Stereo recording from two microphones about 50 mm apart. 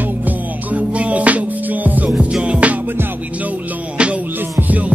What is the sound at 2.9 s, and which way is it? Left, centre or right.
Music, right.